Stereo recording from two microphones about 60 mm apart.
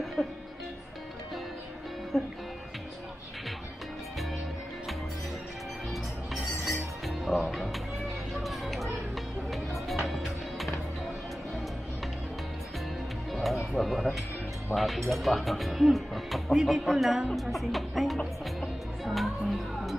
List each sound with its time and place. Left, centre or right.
0.0 s music: centre
7.1 s music: centre
13.3 s music: centre
14.7 s speech: centre
17.3 s music: centre